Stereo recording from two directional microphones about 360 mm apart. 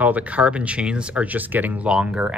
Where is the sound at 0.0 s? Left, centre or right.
Centre.